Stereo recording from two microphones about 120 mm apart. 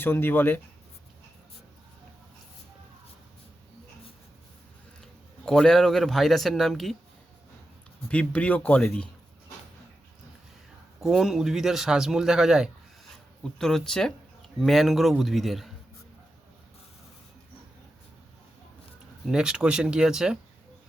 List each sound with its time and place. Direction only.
0.0 s speech: 15° left (ahead or behind)
5.5 s speech: 5° left (ahead or behind)
8.1 s speech: 10° left (ahead or behind)
11.0 s speech: centre (ahead or behind)
19.3 s speech: 5° right (ahead or behind)